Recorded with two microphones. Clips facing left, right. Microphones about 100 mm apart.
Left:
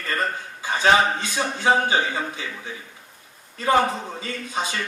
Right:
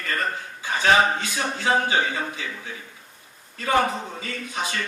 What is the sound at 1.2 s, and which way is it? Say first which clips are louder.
A man's voice: left 3 dB; 25° left (ahead or behind).